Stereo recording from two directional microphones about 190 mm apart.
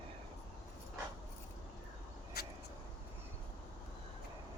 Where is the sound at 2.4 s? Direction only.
55° left (ahead or behind).